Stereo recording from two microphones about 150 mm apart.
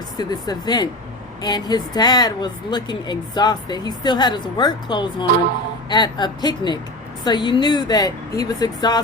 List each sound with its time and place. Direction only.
0.2 s speech: 25° left (ahead or behind)